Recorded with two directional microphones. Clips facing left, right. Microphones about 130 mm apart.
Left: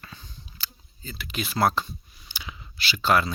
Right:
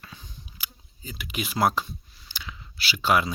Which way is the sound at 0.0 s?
5° right (ahead or behind).